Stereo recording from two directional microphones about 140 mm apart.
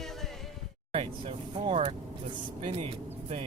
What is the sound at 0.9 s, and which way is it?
Speech, 40° right (ahead or behind).